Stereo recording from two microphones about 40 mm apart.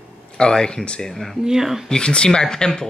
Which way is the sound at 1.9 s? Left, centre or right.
Left.